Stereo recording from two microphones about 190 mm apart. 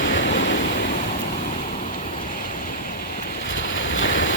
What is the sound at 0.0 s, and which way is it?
Waves, 75° left (ahead or behind).